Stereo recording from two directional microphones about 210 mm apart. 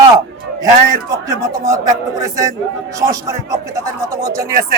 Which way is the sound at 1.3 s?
15° right (ahead or behind).